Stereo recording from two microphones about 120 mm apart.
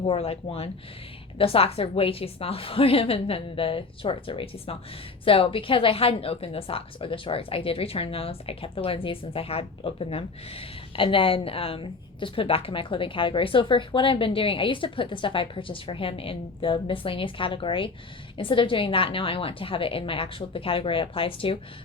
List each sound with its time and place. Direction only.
0.0 s a woman's voice: 55° left (ahead or behind)